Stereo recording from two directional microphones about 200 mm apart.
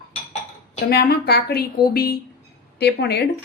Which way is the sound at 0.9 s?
55° left (ahead or behind).